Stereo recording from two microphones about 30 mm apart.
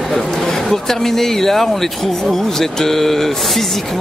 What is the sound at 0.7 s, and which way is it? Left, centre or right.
Speech, centre.